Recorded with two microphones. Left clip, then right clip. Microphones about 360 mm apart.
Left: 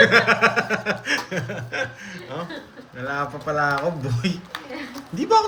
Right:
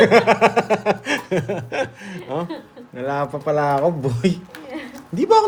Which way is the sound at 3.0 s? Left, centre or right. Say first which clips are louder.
Right 4 dB; centre.